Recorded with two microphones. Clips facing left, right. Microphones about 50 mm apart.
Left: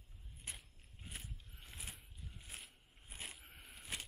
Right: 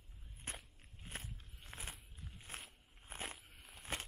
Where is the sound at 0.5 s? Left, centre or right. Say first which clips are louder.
Right 3 dB; right.